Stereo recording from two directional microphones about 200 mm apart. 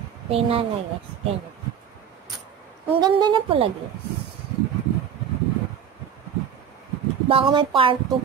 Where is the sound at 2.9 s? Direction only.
20° right (ahead or behind).